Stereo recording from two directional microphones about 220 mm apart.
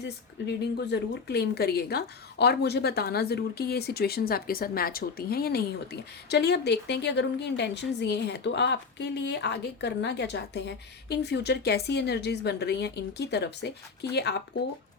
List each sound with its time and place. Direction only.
0.0 s speech: 50° left (ahead or behind)